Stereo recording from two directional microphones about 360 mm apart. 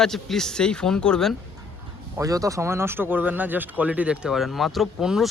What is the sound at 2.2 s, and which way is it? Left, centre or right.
Speech, centre.